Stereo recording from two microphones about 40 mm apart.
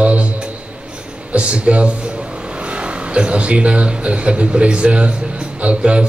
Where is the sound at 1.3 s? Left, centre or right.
Right.